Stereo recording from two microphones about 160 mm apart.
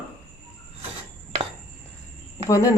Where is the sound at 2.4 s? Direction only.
20° left (ahead or behind).